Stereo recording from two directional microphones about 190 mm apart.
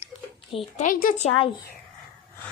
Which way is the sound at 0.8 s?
45° left (ahead or behind).